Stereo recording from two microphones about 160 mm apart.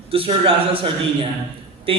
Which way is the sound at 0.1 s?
35° right (ahead or behind).